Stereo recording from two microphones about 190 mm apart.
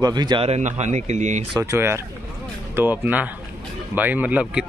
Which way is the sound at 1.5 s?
15° right (ahead or behind).